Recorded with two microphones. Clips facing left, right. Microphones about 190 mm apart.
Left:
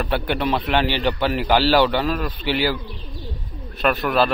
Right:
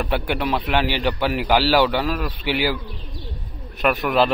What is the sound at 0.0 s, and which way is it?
A man's voice, 10° right (ahead or behind).